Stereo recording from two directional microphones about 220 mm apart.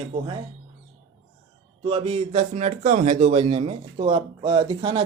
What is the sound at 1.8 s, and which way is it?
A man's voice, 25° right (ahead or behind).